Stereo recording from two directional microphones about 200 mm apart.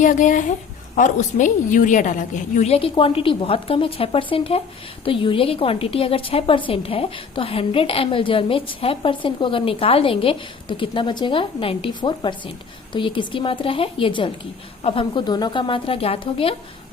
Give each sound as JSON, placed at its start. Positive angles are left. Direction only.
{"t": 0.0, "sound": "a woman's voice", "side_deg": 40}